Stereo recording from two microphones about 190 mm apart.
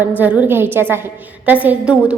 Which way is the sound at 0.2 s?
10° right (ahead or behind).